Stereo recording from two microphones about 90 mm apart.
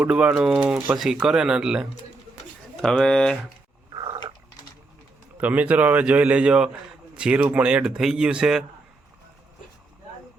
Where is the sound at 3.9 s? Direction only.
50° right (ahead or behind).